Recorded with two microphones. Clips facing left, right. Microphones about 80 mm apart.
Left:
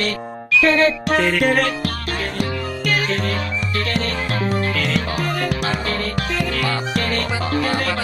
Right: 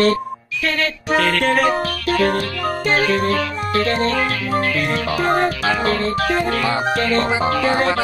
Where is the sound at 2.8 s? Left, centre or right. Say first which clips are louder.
Right 4 dB; right.